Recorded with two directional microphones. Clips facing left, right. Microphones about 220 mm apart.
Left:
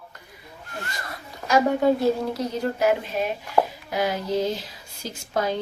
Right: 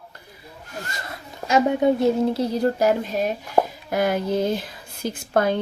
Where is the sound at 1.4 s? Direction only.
20° right (ahead or behind).